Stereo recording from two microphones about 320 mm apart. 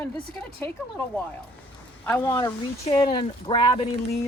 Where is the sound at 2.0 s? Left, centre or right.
Centre.